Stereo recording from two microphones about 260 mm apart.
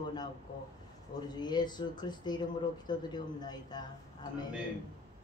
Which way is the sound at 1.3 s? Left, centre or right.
Centre.